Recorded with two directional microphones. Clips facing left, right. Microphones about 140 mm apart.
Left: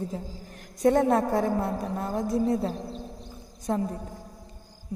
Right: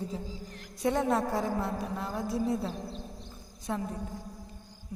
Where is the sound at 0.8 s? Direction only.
45° left (ahead or behind).